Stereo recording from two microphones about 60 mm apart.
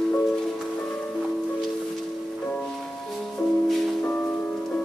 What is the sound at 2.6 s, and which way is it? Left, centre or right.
Music, centre.